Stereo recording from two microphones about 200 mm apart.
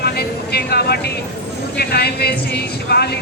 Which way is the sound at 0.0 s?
50° left (ahead or behind).